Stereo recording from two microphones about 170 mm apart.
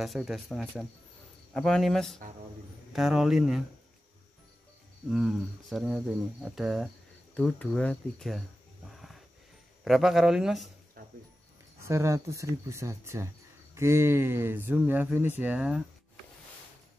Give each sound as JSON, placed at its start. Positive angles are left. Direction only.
{"t": 0.0, "sound": "speech", "side_deg": 0}
{"t": 5.1, "sound": "speech", "side_deg": 0}
{"t": 8.9, "sound": "wild animals", "side_deg": 0}
{"t": 9.8, "sound": "speech", "side_deg": 0}
{"t": 11.0, "sound": "music", "side_deg": -55}
{"t": 11.8, "sound": "speech", "side_deg": -15}